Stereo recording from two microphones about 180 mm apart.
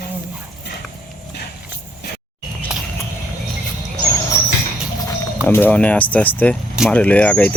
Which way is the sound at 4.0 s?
15° left (ahead or behind).